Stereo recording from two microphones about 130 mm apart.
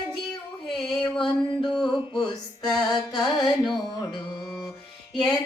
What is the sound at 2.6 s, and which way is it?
Music, 5° left (ahead or behind).